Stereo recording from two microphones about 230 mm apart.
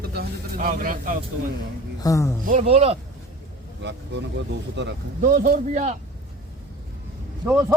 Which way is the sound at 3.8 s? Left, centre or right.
Right.